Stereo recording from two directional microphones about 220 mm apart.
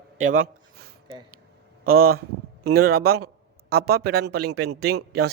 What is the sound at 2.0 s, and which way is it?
Speech, 80° right.